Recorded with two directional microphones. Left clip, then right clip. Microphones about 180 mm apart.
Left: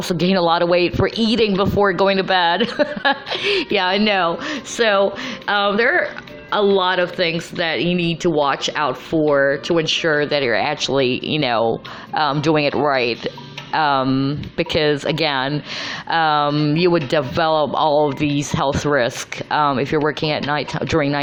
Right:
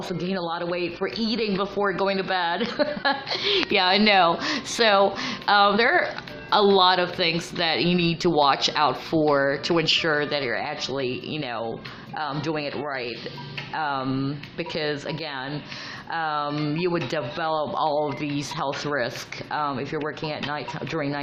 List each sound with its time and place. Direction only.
0.1 s speech: 35° left (ahead or behind)